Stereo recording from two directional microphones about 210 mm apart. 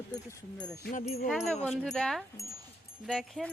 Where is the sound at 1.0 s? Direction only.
30° left (ahead or behind).